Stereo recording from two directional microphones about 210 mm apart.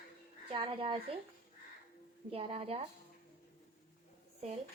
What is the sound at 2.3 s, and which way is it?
Speech, 30° right (ahead or behind).